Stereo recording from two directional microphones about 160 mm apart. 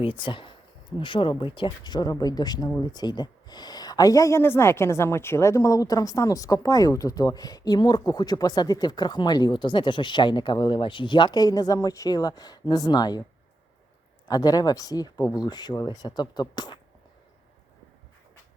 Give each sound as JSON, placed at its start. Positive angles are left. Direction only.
{"t": 0.0, "sound": "speech", "side_deg": 30}
{"t": 14.3, "sound": "speech", "side_deg": 25}